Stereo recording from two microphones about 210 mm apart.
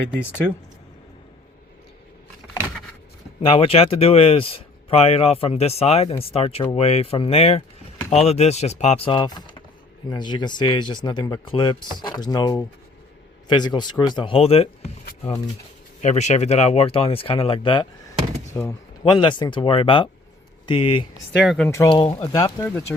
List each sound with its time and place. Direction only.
0.2 s speech: 10° left (ahead or behind)
3.4 s speech: 25° left (ahead or behind)
16.0 s speech: 30° left (ahead or behind)
18.5 s a sound: 15° left (ahead or behind)
19.1 s speech: 25° left (ahead or behind)
21.4 s speech: centre (ahead or behind)
21.7 s speech: 20° left (ahead or behind)